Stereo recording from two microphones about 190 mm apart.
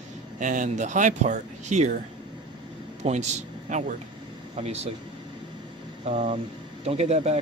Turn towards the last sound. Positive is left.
turn(degrees=-35)  # may be behind; listen again after turning